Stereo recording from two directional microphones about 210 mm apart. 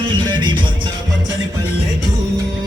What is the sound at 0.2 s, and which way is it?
Music, 20° right (ahead or behind).